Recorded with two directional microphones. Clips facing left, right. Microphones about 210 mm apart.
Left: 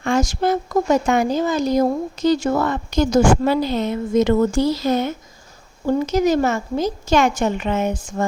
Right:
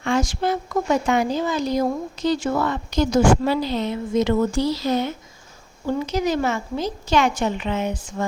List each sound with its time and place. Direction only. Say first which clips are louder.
0.0 s speech: left 3 dB; 45° left (ahead or behind)